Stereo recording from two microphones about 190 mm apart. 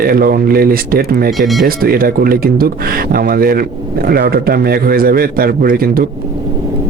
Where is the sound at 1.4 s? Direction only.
Centre (ahead or behind).